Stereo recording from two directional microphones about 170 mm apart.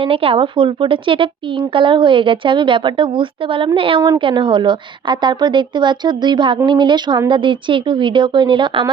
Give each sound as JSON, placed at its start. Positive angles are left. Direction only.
{"t": 0.0, "sound": "a woman's voice", "side_deg": -35}